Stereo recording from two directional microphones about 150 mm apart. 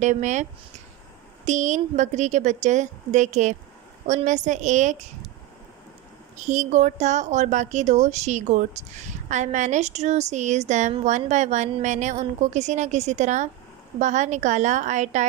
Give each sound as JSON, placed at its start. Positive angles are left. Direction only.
{"t": 0.0, "sound": "a woman's voice", "side_deg": -50}
{"t": 6.4, "sound": "a woman's voice", "side_deg": -50}